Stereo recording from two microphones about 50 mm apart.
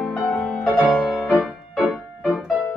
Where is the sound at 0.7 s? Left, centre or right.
Left.